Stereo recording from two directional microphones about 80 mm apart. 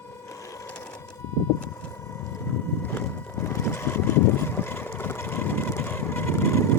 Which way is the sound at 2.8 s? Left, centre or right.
Left.